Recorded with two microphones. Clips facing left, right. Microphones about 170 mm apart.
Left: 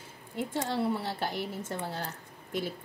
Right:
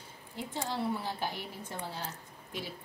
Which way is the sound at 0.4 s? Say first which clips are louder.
Left 5 dB; 55° left (ahead or behind).